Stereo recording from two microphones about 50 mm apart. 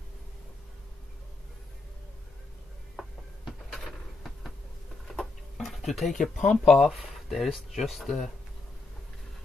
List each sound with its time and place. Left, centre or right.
3.0 s a sound: centre
5.0 s tick-tock: centre
6.5 s speech: centre